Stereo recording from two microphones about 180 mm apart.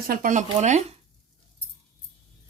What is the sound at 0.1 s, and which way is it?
Speech, 50° right (ahead or behind).